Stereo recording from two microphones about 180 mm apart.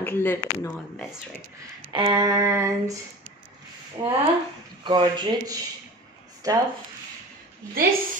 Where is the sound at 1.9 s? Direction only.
25° right (ahead or behind).